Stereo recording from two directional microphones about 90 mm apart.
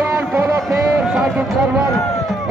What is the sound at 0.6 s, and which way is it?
Speech, 5° right (ahead or behind).